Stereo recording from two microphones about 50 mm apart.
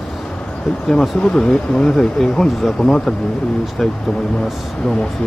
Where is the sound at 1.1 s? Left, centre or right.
Left.